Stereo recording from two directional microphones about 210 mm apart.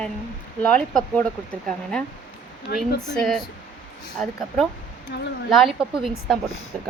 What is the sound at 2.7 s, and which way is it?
Speech, 50° left (ahead or behind).